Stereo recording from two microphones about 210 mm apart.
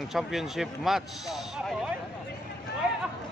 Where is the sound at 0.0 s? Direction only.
Centre (ahead or behind).